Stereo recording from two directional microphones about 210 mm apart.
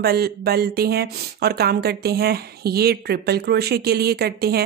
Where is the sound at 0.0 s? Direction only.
50° right (ahead or behind).